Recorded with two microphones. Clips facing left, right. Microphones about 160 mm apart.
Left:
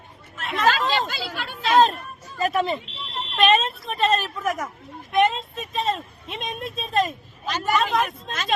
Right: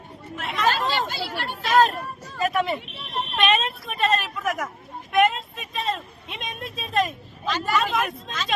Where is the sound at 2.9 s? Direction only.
75° right (ahead or behind).